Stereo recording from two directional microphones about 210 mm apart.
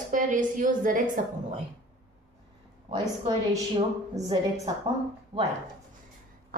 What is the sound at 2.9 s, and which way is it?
A woman's voice, 20° right (ahead or behind).